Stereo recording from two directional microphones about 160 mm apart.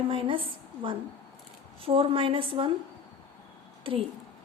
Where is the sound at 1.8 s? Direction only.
35° right (ahead or behind).